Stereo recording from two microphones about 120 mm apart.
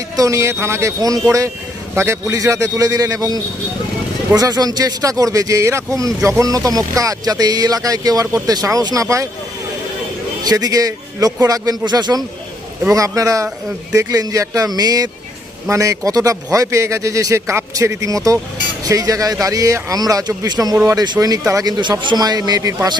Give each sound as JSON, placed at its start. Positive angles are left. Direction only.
{"t": 0.2, "sound": "speech", "side_deg": -25}
{"t": 10.4, "sound": "speech", "side_deg": -30}